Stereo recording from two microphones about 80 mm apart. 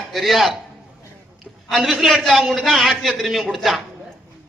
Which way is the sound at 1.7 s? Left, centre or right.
Centre.